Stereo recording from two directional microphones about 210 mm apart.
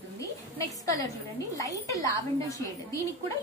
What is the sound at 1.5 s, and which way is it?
A woman's voice, 15° left (ahead or behind).